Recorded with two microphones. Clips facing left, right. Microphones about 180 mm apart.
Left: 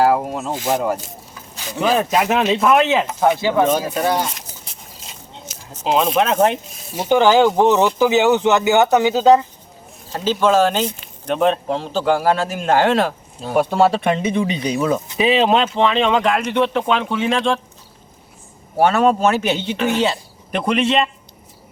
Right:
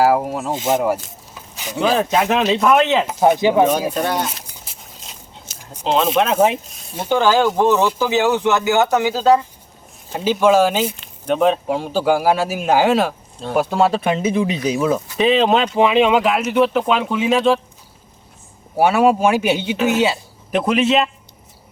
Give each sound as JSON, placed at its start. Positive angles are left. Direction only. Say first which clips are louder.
{"t": 0.0, "sound": "a sound", "louder": "right 1 dB", "side_deg": -5}
{"t": 0.5, "sound": "speech", "louder": "right 2 dB", "side_deg": -20}
{"t": 0.8, "sound": "speech", "louder": "right 2 dB", "side_deg": -10}
{"t": 2.0, "sound": "speech", "louder": "even", "side_deg": 5}
{"t": 3.2, "sound": "speech", "louder": "right 4 dB", "side_deg": -15}
{"t": 4.6, "sound": "a sound", "louder": "even", "side_deg": 0}
{"t": 5.5, "sound": "a sound", "louder": "left 2 dB", "side_deg": -30}
{"t": 5.8, "sound": "speech", "louder": "even", "side_deg": 0}
{"t": 10.1, "sound": "speech", "louder": "right 2 dB", "side_deg": -10}
{"t": 18.8, "sound": "speech", "louder": "right 1 dB", "side_deg": -10}